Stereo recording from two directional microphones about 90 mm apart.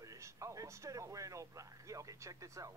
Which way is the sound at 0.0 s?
35° right (ahead or behind).